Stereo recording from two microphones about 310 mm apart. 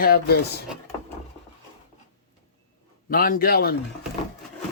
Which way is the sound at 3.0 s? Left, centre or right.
Left.